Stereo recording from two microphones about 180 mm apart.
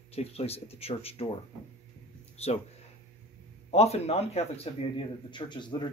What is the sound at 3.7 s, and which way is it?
Speech, 35° left (ahead or behind).